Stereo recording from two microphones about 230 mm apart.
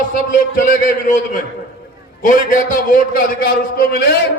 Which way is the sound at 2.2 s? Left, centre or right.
Left.